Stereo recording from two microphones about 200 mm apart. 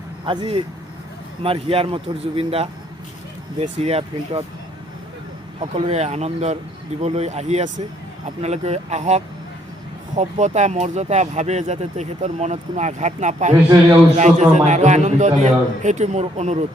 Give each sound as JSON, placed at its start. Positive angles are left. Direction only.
{"t": 0.3, "sound": "speech", "side_deg": -25}
{"t": 5.5, "sound": "speech", "side_deg": -30}